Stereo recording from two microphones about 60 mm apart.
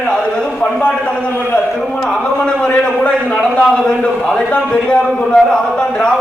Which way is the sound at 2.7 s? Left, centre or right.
Centre.